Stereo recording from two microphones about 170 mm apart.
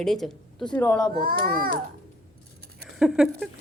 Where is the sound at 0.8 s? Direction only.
20° left (ahead or behind).